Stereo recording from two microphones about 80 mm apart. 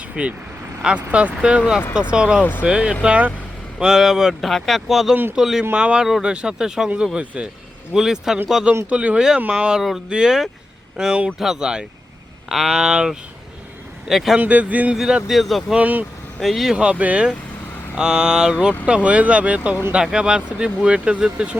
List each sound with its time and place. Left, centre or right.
0.2 s speech: centre
2.4 s speech: left
2.6 s speech: centre
3.8 s speech: centre
14.3 s speech: centre
14.9 s speech: centre
15.7 s speech: centre
16.4 s speech: centre